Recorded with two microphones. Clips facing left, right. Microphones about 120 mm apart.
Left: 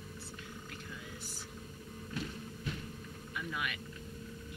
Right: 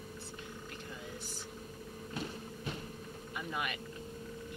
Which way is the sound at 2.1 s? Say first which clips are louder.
Even; 30° right (ahead or behind).